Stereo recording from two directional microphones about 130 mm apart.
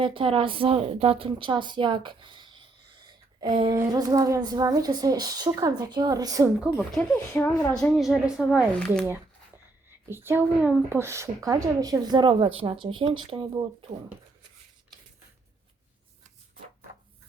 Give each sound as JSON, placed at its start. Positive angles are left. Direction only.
{"t": 0.0, "sound": "a woman's voice", "side_deg": -40}
{"t": 6.7, "sound": "speech", "side_deg": 15}
{"t": 7.8, "sound": "a woman's voice", "side_deg": 0}
{"t": 10.1, "sound": "speech", "side_deg": -15}